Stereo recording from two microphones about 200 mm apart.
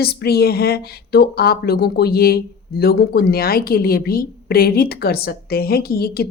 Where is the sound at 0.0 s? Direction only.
50° left (ahead or behind).